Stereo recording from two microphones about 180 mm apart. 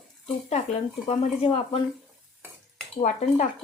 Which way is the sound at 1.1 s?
35° left (ahead or behind).